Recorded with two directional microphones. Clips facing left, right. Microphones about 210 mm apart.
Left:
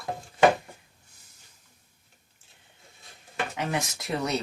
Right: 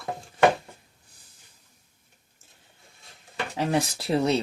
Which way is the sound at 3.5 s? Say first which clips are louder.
Right 8 dB; 35° right (ahead or behind).